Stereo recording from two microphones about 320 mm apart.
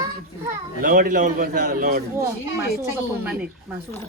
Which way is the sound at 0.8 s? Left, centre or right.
Right.